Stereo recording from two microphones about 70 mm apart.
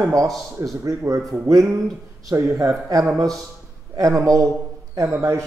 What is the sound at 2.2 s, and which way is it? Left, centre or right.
Speech, right.